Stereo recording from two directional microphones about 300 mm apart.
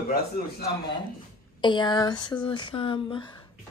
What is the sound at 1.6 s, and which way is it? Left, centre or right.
Speech, centre.